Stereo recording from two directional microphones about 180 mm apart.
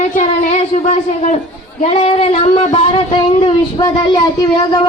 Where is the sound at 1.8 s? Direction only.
35° left (ahead or behind).